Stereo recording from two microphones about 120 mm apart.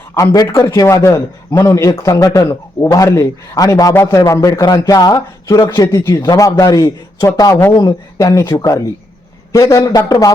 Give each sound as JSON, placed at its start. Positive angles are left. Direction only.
{"t": 0.1, "sound": "a man's voice", "side_deg": 25}